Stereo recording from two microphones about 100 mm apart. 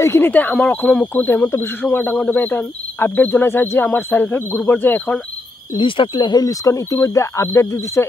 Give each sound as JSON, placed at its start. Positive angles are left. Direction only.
{"t": 0.0, "sound": "speech", "side_deg": 25}
{"t": 5.8, "sound": "speech", "side_deg": 55}